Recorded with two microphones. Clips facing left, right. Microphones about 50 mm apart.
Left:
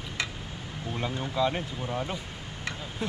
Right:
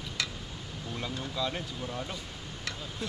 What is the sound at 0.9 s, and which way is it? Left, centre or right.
Speech, left.